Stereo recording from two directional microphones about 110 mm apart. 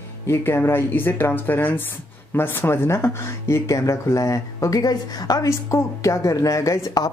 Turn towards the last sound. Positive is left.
turn(degrees=30)  # may be behind; listen again after turning